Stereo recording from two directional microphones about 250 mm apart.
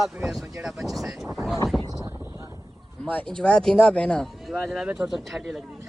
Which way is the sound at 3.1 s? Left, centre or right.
Centre.